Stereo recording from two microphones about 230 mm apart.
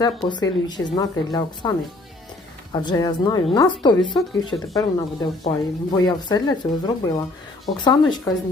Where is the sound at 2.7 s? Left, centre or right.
Centre.